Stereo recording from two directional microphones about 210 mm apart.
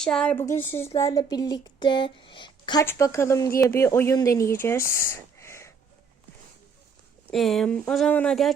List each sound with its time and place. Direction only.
0.0 s speech: 5° left (ahead or behind)
7.3 s speech: centre (ahead or behind)